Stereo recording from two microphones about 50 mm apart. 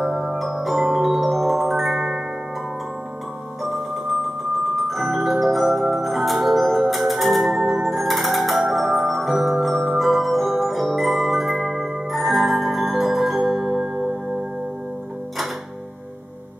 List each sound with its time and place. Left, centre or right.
0.0 s music: centre
4.7 s music: centre